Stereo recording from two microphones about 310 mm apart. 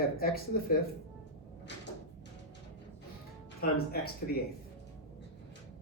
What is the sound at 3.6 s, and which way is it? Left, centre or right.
Speech, left.